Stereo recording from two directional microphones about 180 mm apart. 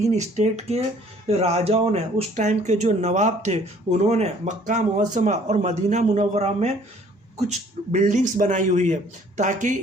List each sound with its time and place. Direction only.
0.0 s a man's voice: 40° right (ahead or behind)